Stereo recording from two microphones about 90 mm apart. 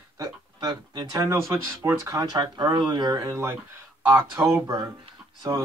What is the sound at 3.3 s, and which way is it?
Speech, 30° right (ahead or behind).